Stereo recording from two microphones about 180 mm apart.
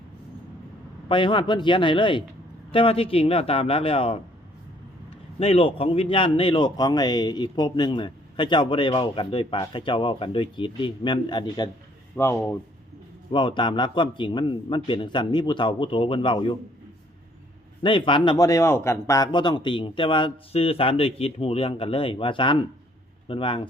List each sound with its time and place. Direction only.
1.0 s a man's voice: 30° left (ahead or behind)
5.4 s a man's voice: 30° left (ahead or behind); by 12.4 s 15° left (ahead or behind)
13.3 s a man's voice: 25° left (ahead or behind)
17.8 s a man's voice: 25° left (ahead or behind)